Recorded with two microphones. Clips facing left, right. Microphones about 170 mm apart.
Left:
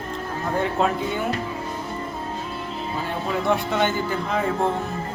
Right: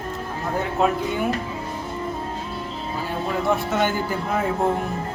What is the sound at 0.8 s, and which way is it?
Speech, 5° right (ahead or behind).